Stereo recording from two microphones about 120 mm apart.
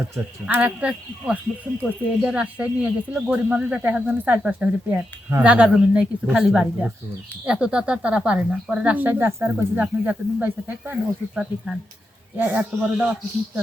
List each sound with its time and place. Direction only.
0.4 s speech: 10° right (ahead or behind)
12.4 s speech: 15° right (ahead or behind)